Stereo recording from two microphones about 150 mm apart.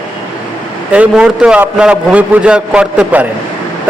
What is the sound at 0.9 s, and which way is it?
A man's voice, 10° right (ahead or behind).